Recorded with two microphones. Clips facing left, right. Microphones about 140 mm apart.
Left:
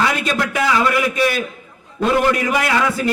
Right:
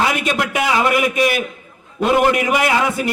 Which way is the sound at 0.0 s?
20° right (ahead or behind).